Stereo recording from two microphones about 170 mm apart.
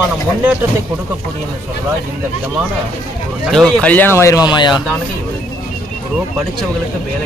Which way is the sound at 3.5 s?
Centre (ahead or behind).